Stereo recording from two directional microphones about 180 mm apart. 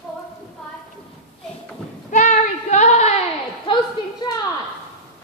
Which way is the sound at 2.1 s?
45° left (ahead or behind).